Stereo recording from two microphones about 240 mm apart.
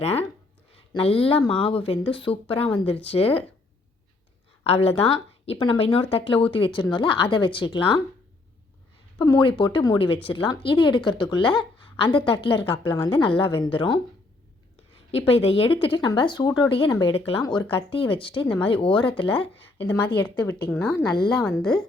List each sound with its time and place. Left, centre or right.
0.0 s speech: left
4.6 s speech: left
9.1 s speech: centre
15.3 s speech: left
19.8 s a woman's voice: centre